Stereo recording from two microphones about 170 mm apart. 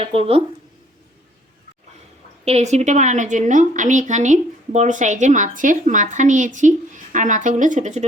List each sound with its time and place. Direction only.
0.0 s speech: 35° right (ahead or behind)
2.4 s a woman's voice: 40° right (ahead or behind)